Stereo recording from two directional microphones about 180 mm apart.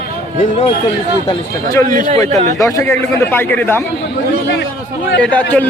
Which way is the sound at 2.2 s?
40° right (ahead or behind).